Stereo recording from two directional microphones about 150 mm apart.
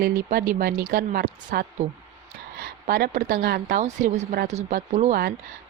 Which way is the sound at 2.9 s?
85° right.